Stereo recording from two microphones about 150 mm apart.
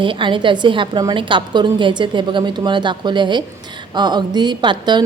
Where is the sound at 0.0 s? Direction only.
35° right (ahead or behind).